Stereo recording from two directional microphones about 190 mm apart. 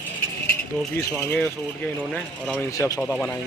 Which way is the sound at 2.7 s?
20° left (ahead or behind).